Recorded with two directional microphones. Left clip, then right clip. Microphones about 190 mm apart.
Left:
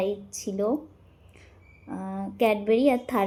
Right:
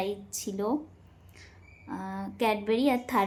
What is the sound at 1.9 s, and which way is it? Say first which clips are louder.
Speech: left 1 dB; 5° right (ahead or behind).